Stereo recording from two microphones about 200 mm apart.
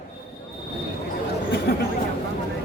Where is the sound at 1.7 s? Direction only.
50° left (ahead or behind).